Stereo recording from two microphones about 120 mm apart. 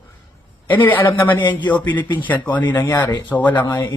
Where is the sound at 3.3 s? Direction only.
15° left (ahead or behind).